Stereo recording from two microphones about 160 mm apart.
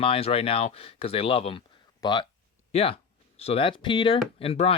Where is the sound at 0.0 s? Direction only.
35° left (ahead or behind).